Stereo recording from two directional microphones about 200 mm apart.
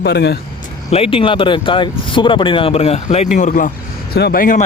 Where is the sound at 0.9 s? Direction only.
25° left (ahead or behind).